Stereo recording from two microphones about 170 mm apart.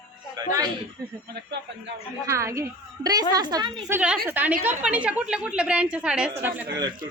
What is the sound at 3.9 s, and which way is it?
A woman's voice, 5° right (ahead or behind).